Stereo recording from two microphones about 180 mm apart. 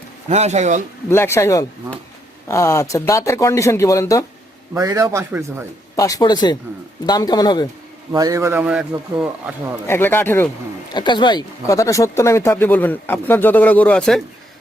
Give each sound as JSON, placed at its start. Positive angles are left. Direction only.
{"t": 0.3, "sound": "speech", "side_deg": -40}
{"t": 1.1, "sound": "speech", "side_deg": 15}
{"t": 4.7, "sound": "a man's voice", "side_deg": -15}
{"t": 6.0, "sound": "a man's voice", "side_deg": 20}
{"t": 8.1, "sound": "a man's voice", "side_deg": -20}
{"t": 9.8, "sound": "speech", "side_deg": 10}
{"t": 10.9, "sound": "speech", "side_deg": 25}